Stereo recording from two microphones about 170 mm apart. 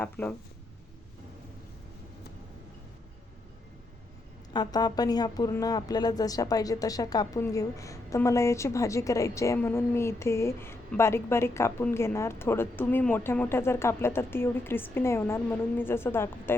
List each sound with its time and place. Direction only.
0.0 s speech: 10° left (ahead or behind)
4.5 s speech: 25° left (ahead or behind)